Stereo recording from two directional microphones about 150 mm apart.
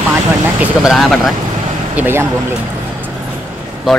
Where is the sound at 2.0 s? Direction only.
15° right (ahead or behind).